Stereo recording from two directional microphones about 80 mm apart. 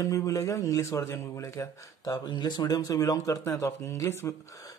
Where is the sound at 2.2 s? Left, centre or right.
Left.